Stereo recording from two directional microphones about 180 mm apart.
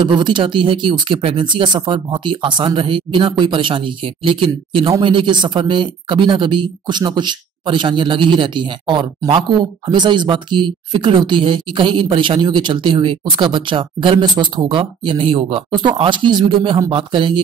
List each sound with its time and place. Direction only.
0.0 s speech: 25° right (ahead or behind)